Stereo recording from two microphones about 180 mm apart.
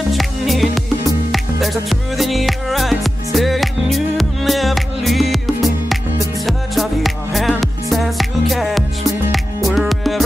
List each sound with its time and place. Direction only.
0.1 s music: centre (ahead or behind)